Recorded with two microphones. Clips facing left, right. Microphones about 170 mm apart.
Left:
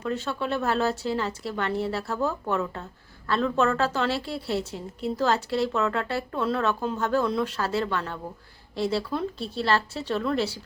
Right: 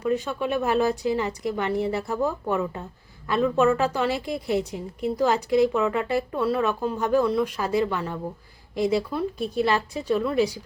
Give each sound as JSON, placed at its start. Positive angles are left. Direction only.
{"t": 0.0, "sound": "a woman's voice", "side_deg": -15}